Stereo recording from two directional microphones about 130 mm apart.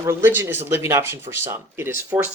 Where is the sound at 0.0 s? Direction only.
20° right (ahead or behind).